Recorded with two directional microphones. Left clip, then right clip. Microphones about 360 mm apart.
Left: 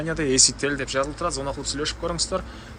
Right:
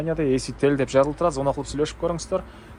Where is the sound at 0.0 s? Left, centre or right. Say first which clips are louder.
Left 2 dB; centre.